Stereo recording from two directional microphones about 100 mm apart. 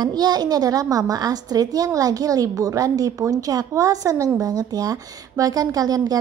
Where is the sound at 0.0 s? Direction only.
45° right (ahead or behind).